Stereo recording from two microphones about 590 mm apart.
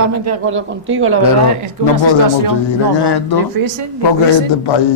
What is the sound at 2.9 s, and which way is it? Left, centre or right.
Speech, left.